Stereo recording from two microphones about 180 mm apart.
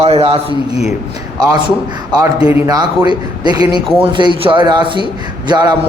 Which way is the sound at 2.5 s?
15° right (ahead or behind).